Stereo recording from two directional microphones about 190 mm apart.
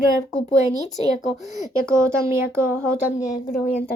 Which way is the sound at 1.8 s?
15° right (ahead or behind).